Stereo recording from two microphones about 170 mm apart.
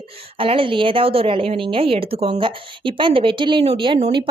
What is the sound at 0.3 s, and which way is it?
A woman's voice, 30° right (ahead or behind).